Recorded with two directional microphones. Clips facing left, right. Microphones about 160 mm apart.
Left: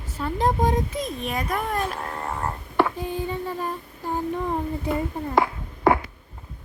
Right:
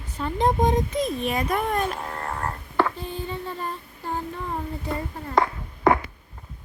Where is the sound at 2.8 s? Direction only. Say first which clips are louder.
Left 2 dB; 15° left (ahead or behind).